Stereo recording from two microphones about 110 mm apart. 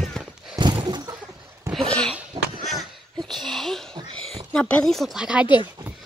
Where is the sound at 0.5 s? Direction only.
40° right (ahead or behind).